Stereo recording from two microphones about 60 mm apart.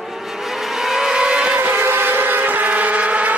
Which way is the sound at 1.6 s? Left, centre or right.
Right.